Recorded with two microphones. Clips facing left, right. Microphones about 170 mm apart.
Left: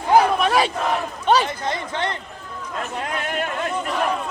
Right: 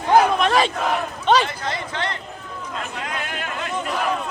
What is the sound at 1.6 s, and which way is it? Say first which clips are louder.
Speech: left 2 dB; 20° left (ahead or behind).